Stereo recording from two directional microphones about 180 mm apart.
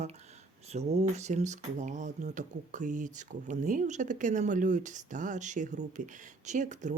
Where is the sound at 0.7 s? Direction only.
40° right (ahead or behind).